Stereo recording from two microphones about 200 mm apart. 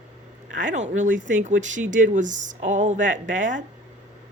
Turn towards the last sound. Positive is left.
turn(degrees=-40)  # may be behind; listen again after turning